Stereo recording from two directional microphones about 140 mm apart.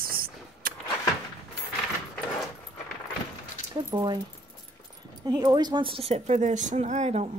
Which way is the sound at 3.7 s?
35° right (ahead or behind).